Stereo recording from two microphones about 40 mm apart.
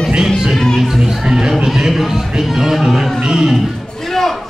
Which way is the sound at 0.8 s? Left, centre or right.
Centre.